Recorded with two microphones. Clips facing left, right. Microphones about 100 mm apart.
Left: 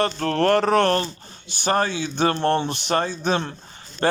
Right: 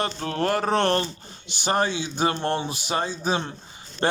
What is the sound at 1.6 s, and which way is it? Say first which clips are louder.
Speech: left 2 dB; 15° right (ahead or behind).